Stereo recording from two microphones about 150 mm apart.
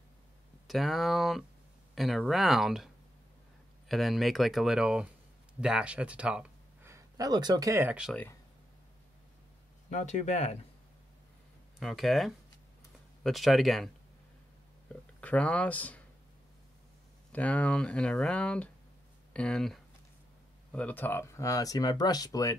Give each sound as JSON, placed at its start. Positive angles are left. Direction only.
{"t": 0.7, "sound": "speech", "side_deg": 0}
{"t": 3.9, "sound": "speech", "side_deg": 0}
{"t": 9.8, "sound": "speech", "side_deg": 50}
{"t": 11.8, "sound": "speech", "side_deg": 0}
{"t": 15.1, "sound": "speech", "side_deg": 10}
{"t": 17.3, "sound": "speech", "side_deg": 10}